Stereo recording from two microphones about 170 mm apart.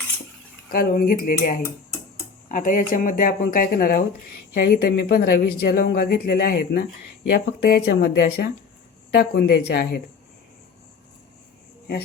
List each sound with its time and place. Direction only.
0.7 s speech: 60° left (ahead or behind)
1.6 s tick-tock: 15° left (ahead or behind)
2.5 s speech: 50° left (ahead or behind); by 10.0 s 75° left (ahead or behind)